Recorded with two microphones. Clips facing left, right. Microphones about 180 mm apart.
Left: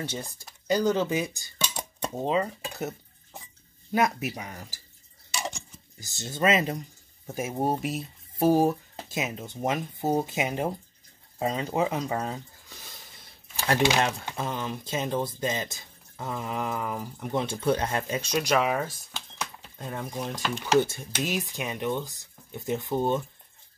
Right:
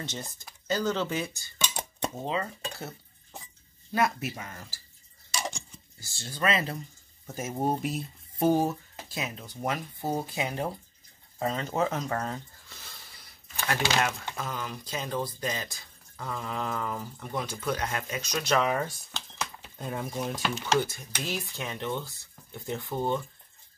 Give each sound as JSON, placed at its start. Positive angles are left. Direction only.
{"t": 0.0, "sound": "speech", "side_deg": 10}
{"t": 3.9, "sound": "speech", "side_deg": 15}
{"t": 5.4, "sound": "a sound", "side_deg": 15}
{"t": 7.2, "sound": "speech", "side_deg": 10}
{"t": 9.1, "sound": "speech", "side_deg": 20}
{"t": 14.3, "sound": "speech", "side_deg": 25}
{"t": 17.3, "sound": "speech", "side_deg": 25}
{"t": 18.4, "sound": "speech", "side_deg": 10}
{"t": 20.8, "sound": "speech", "side_deg": 25}